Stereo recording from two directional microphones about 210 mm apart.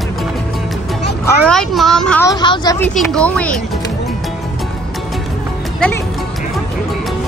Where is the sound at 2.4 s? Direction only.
20° left (ahead or behind).